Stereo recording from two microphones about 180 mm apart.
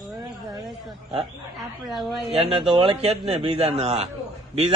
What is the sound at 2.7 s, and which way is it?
A man's voice, 30° right (ahead or behind).